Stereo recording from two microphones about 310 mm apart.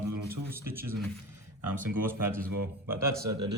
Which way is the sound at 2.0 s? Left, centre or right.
Centre.